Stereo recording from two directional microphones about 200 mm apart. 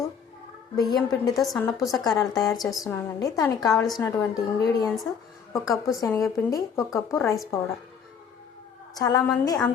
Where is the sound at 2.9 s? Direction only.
20° left (ahead or behind).